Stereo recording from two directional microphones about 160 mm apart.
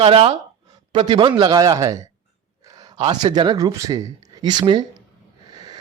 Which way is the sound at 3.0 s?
30° right (ahead or behind).